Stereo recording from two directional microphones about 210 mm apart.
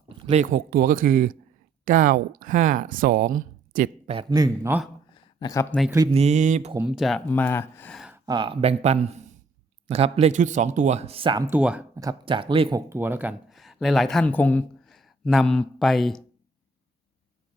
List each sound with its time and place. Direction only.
0.3 s speech: 35° right (ahead or behind)
4.1 s speech: 20° right (ahead or behind)
5.1 s a sound: 20° left (ahead or behind)
6.1 s speech: 30° right (ahead or behind)
6.7 s speech: 5° right (ahead or behind)
8.1 s speech: 20° right (ahead or behind)
11.4 s speech: 5° right (ahead or behind)
11.9 s speech: 20° right (ahead or behind)
12.9 s speech: 10° right (ahead or behind)